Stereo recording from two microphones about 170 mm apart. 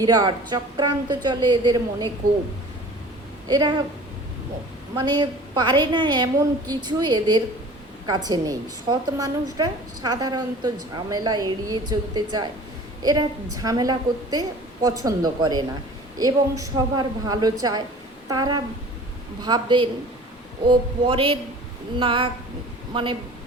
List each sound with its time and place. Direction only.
0.0 s a woman's voice: 25° right (ahead or behind)
3.5 s a woman's voice: 25° right (ahead or behind)
4.9 s a woman's voice: 25° right (ahead or behind)